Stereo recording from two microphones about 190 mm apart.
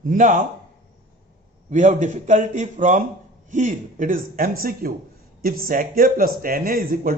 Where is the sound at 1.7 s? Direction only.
40° right (ahead or behind).